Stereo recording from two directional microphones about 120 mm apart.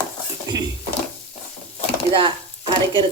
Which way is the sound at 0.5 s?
30° right (ahead or behind).